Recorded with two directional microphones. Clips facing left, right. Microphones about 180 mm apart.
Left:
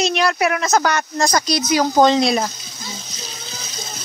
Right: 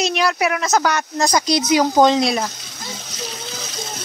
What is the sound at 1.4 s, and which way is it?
Speech, 20° right (ahead or behind).